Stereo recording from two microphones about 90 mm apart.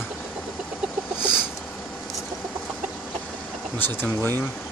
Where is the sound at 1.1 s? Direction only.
50° right (ahead or behind).